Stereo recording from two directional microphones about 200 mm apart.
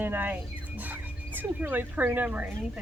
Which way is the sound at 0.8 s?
10° right (ahead or behind).